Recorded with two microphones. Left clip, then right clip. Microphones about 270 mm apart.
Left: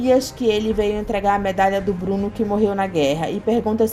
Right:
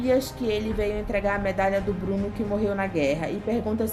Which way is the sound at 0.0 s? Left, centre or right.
Centre.